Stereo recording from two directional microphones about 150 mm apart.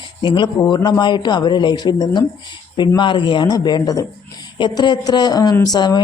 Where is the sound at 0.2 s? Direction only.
30° left (ahead or behind).